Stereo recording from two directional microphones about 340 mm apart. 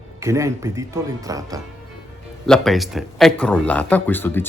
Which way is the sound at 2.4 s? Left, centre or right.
Centre.